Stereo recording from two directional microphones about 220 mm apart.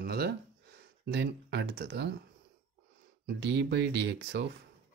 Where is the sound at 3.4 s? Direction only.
50° right (ahead or behind).